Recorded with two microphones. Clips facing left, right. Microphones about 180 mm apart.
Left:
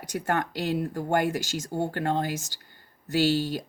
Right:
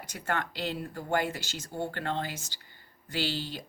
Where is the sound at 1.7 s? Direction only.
45° left (ahead or behind).